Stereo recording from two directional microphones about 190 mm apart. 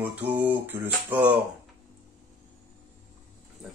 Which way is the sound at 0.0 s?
10° right (ahead or behind).